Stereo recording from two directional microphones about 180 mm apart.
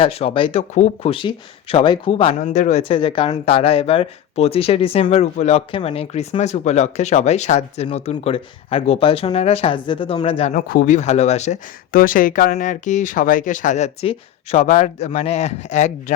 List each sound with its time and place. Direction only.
0.0 s speech: 30° left (ahead or behind)
2.4 s speech: 40° left (ahead or behind)
10.5 s speech: 50° left (ahead or behind)